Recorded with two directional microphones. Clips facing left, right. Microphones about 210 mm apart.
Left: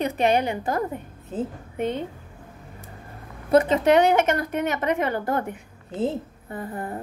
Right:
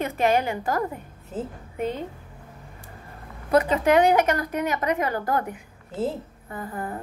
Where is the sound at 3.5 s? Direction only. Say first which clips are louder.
Left 2 dB; 25° left (ahead or behind).